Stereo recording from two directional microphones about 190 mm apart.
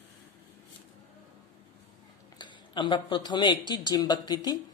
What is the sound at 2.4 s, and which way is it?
Speech, 25° left (ahead or behind).